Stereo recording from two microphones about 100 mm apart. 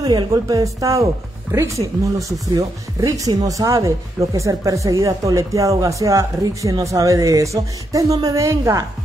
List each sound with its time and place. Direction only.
0.0 s speech: 40° right (ahead or behind)